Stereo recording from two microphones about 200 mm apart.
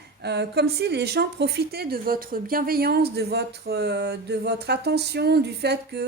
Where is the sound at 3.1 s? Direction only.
55° right (ahead or behind).